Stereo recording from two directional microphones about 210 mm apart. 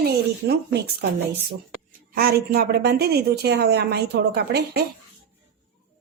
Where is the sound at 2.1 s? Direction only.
45° right (ahead or behind).